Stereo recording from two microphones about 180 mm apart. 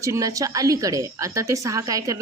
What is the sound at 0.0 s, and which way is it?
A woman's voice, 20° right (ahead or behind).